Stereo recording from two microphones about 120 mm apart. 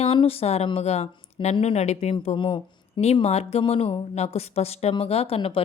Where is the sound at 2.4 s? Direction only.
40° left (ahead or behind).